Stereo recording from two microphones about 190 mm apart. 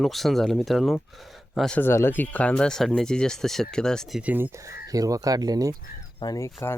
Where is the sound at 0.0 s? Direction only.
Centre (ahead or behind); by 5.7 s 20° right (ahead or behind).